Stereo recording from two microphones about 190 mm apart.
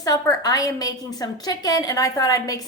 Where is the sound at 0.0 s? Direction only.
20° left (ahead or behind).